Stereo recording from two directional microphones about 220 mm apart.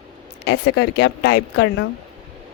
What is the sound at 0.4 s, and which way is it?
Speech, 50° left (ahead or behind).